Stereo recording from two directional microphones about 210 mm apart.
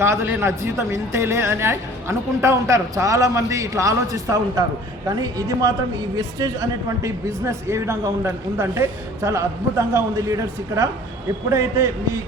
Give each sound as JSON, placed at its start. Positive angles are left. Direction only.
{"t": 0.0, "sound": "speech", "side_deg": -10}